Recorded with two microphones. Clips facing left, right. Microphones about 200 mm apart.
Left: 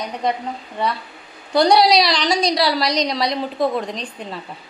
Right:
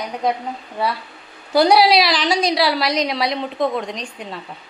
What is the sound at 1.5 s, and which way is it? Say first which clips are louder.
A woman's voice: right 1 dB; 5° right (ahead or behind).